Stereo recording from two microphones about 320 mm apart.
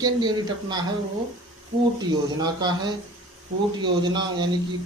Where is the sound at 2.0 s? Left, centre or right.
Centre.